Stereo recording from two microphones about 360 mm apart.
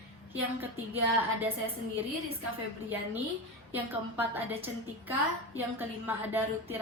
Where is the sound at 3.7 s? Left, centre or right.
Centre.